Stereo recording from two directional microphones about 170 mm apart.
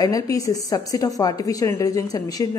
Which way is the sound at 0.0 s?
20° left (ahead or behind).